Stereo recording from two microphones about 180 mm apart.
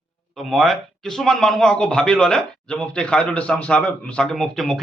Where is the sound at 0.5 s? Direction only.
Centre (ahead or behind).